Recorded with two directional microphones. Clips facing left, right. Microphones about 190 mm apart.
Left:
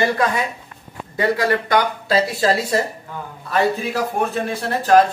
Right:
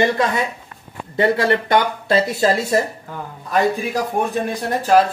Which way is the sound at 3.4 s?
15° right (ahead or behind).